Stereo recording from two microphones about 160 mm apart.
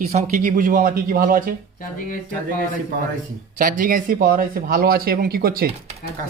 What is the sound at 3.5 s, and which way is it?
Speech, 60° right (ahead or behind).